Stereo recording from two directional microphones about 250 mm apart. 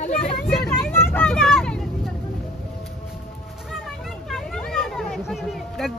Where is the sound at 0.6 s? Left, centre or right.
Centre.